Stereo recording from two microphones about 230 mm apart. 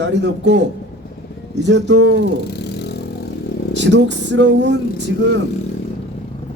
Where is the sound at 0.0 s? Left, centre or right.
Right.